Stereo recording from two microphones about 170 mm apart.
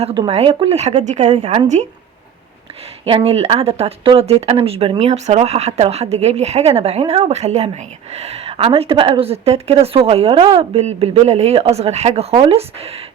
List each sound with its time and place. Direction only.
0.0 s a woman's voice: 30° right (ahead or behind)
3.1 s a woman's voice: 35° right (ahead or behind)